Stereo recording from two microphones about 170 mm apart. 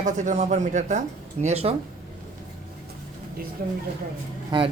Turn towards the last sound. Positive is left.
turn(degrees=-30)  # may be behind; listen again after turning